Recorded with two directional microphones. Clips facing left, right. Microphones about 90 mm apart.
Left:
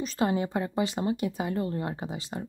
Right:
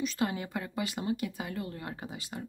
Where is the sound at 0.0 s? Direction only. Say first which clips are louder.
Left 5 dB; 35° left (ahead or behind).